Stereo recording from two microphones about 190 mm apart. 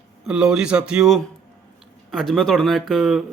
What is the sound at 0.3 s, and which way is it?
Speech, 5° right (ahead or behind).